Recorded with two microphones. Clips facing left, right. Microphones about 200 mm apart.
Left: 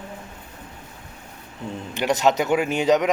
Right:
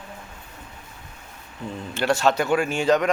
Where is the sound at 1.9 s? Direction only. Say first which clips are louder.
Left 1 dB; 15° left (ahead or behind).